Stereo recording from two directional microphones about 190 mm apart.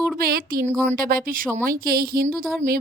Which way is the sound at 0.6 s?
10° right (ahead or behind).